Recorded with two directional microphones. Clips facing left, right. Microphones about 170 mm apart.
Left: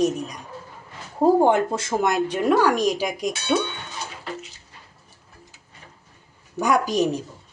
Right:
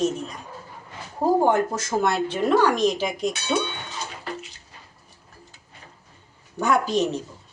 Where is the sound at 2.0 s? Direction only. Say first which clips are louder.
Even; 15° left (ahead or behind).